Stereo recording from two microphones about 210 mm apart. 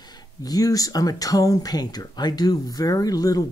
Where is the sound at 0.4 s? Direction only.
15° left (ahead or behind).